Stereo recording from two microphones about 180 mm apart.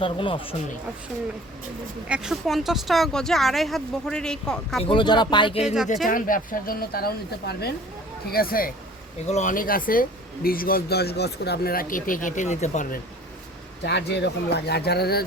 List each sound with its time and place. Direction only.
0.0 s speech: 30° left (ahead or behind)
2.0 s speech: 5° right (ahead or behind)
4.8 s speech: 30° left (ahead or behind)
5.6 s speech: 5° right (ahead or behind)
6.1 s speech: 50° left (ahead or behind)
9.2 s speech: 40° left (ahead or behind)
13.8 s speech: 70° left (ahead or behind)